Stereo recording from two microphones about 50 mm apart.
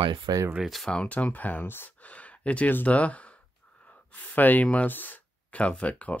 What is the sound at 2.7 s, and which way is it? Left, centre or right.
Speech, left.